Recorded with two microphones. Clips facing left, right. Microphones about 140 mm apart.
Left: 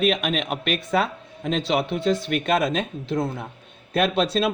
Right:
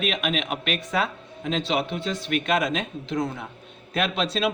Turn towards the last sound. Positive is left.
turn(degrees=45)  # may be behind; listen again after turning